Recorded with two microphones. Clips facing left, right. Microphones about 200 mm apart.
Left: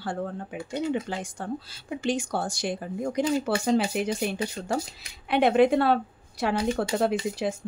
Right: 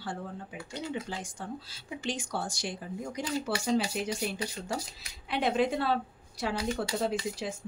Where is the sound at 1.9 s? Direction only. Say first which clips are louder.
Left 7 dB; 50° left (ahead or behind).